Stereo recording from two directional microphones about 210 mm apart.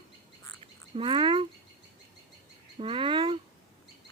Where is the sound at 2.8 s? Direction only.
25° right (ahead or behind).